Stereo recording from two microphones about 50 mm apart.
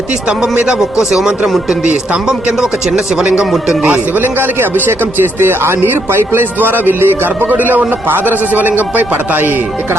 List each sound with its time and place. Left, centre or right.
0.8 s speech: centre
3.8 s speech: right
7.5 s a man's voice: right